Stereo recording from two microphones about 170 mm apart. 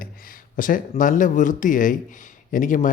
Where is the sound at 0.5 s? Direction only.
55° left (ahead or behind).